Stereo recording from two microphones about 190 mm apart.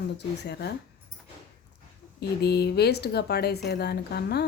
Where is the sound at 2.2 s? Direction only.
60° left (ahead or behind).